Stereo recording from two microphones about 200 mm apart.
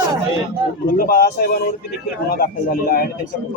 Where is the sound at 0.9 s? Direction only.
45° left (ahead or behind).